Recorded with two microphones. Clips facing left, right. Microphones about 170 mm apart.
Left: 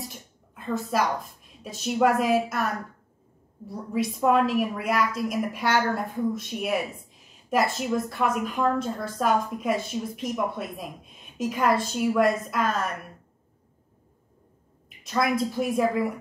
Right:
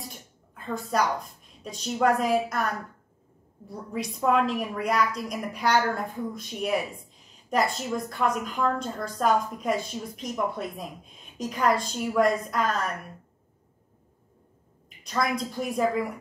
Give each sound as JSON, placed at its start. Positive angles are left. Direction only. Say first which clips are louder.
{"t": 0.6, "sound": "a woman's voice", "louder": "left 1 dB", "side_deg": 0}
{"t": 15.0, "sound": "speech", "louder": "left 3 dB", "side_deg": 5}